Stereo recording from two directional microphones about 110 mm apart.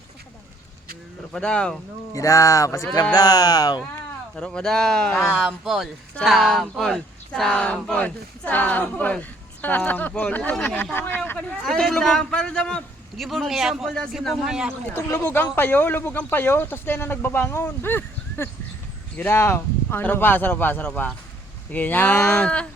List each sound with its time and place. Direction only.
1.3 s a woman's voice: 5° left (ahead or behind)
2.1 s speech: 30° left (ahead or behind)
4.4 s a man's voice: 10° left (ahead or behind)
5.3 s a man's voice: 5° right (ahead or behind); by 11.2 s 20° left (ahead or behind)
11.6 s a man's voice: 5° left (ahead or behind)
14.8 s a woman's voice: 20° left (ahead or behind)